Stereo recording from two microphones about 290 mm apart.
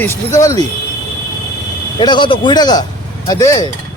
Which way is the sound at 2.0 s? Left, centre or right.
Centre.